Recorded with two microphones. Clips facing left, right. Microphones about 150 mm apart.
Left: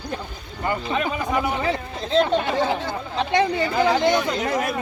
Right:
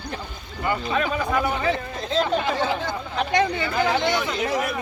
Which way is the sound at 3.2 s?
25° left (ahead or behind).